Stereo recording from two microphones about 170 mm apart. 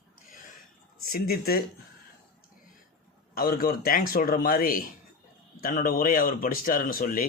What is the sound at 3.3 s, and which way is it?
Speech, 60° left (ahead or behind).